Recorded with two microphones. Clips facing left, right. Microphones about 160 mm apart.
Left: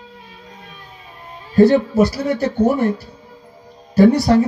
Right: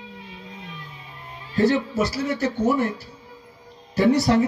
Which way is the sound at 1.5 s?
55° left (ahead or behind).